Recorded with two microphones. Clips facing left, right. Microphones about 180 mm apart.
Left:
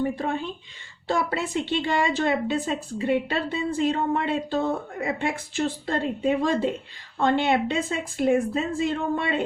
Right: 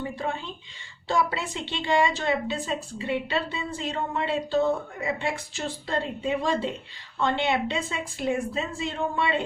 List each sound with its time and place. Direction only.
0.2 s a woman's voice: 55° left (ahead or behind)